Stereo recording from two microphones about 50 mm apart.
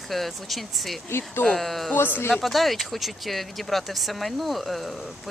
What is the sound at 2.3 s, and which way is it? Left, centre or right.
Speech, centre.